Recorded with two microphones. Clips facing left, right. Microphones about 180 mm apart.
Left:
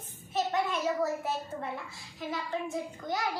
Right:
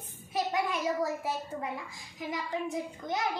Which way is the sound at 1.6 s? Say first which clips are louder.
Even; 15° right (ahead or behind).